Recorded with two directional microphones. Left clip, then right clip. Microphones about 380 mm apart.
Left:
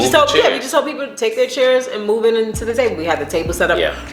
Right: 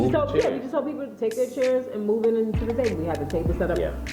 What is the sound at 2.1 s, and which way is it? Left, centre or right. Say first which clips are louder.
Speech: left 7 dB; centre.